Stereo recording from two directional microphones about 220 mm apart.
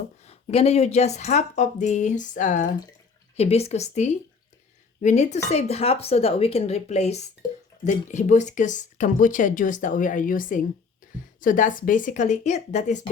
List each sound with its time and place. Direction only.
0.3 s speech: 30° left (ahead or behind)
11.0 s a sound: 35° left (ahead or behind)
11.3 s speech: 35° left (ahead or behind)